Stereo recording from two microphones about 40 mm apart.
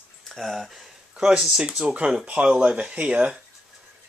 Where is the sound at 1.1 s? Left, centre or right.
Right.